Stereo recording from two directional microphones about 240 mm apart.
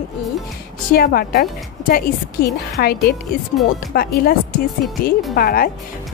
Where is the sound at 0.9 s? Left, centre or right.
Left.